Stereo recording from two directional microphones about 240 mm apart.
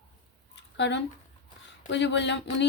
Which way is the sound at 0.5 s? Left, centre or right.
Left.